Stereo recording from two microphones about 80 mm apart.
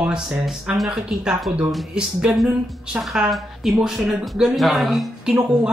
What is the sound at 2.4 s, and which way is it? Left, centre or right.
Speech, centre.